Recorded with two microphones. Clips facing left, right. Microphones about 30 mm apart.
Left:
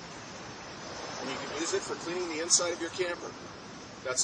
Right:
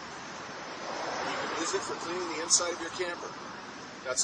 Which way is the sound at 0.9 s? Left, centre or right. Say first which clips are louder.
Right 4 dB; right.